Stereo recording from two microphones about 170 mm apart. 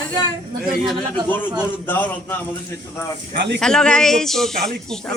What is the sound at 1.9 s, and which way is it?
Speech, 10° left (ahead or behind).